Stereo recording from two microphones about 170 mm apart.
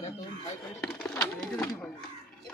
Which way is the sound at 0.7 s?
5° left (ahead or behind).